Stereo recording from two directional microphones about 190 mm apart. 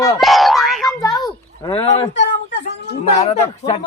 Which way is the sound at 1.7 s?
30° left (ahead or behind).